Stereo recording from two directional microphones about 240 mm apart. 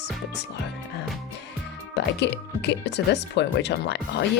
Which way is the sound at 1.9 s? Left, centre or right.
Left.